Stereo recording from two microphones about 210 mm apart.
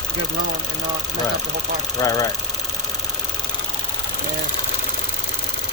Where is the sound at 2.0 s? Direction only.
15° left (ahead or behind).